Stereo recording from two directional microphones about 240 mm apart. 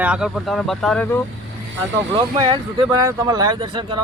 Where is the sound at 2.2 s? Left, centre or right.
Centre.